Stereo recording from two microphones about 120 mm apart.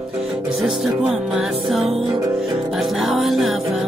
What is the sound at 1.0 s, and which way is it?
Music, centre (ahead or behind).